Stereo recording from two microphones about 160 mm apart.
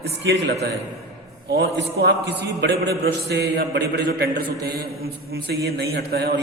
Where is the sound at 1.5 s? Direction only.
90° right.